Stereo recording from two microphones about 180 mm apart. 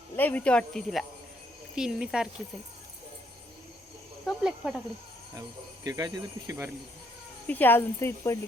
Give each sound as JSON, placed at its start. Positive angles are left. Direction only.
{"t": 0.2, "sound": "speech", "side_deg": 10}
{"t": 4.3, "sound": "speech", "side_deg": -5}
{"t": 5.3, "sound": "cricket", "side_deg": -20}
{"t": 7.4, "sound": "speech", "side_deg": 10}